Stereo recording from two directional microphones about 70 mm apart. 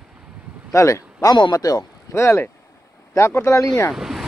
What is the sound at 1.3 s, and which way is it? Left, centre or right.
Speech, left.